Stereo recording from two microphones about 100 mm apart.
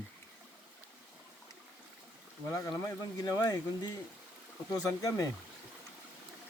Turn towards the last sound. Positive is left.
turn(degrees=35)  # may be behind; listen again after turning